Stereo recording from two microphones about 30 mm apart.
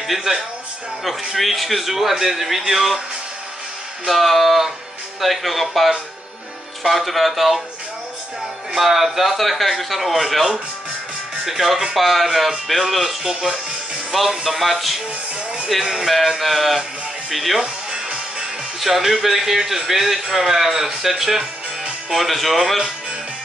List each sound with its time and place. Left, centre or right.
0.0 s a man's voice: centre
4.1 s speech: centre
8.7 s speech: centre
11.4 s a man's voice: centre
12.3 s a man's voice: centre
13.2 s speech: centre
14.3 s speech: centre
15.7 s a man's voice: centre
16.1 s speech: centre
17.6 s music: right
18.8 s a man's voice: centre